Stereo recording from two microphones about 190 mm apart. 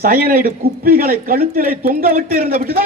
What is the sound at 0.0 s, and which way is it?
A man's voice, 50° right (ahead or behind).